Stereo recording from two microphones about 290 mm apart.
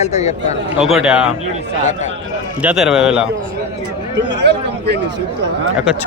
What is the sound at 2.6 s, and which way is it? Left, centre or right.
Speech, centre.